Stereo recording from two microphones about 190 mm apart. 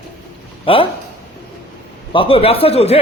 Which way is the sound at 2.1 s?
30° left (ahead or behind).